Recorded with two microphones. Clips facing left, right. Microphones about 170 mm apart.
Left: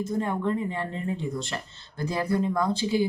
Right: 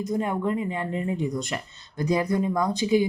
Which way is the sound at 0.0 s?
15° right (ahead or behind).